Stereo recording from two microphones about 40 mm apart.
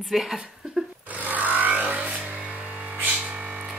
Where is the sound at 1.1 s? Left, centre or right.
Right.